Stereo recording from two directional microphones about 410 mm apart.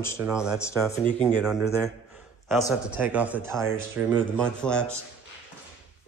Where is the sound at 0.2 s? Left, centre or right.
Centre.